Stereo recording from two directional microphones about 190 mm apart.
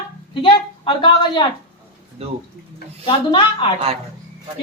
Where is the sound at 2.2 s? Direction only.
30° right (ahead or behind).